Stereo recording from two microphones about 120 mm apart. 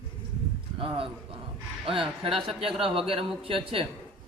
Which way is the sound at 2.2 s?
50° right (ahead or behind).